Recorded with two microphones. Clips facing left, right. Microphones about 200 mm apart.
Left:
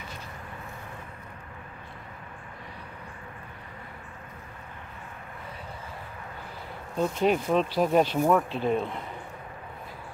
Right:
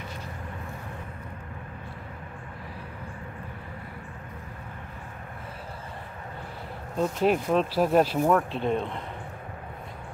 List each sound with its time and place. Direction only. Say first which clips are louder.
7.0 s speech: right 1 dB; centre (ahead or behind)